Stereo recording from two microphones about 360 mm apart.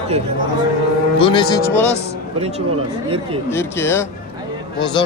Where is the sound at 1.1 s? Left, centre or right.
Centre.